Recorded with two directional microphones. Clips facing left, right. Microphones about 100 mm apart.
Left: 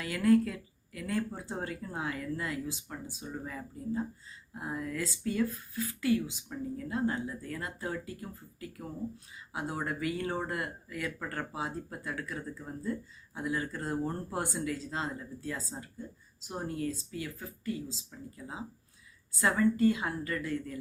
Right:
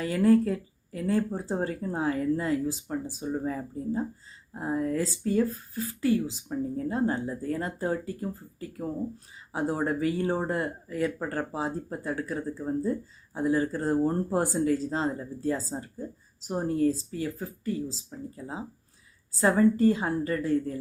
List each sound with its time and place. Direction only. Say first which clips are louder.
0.2 s speech: right 4 dB; 30° right (ahead or behind)